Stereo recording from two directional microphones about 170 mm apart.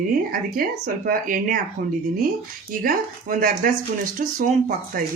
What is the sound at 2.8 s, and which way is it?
Speech, 55° right (ahead or behind).